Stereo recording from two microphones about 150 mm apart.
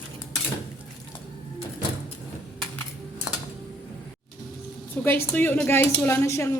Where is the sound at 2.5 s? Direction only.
10° left (ahead or behind).